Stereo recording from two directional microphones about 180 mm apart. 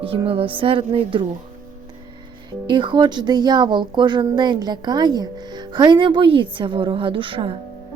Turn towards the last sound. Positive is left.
turn(degrees=-30)  # may be behind; listen again after turning